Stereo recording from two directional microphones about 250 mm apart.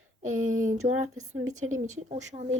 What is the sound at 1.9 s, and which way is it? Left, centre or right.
Speech, right.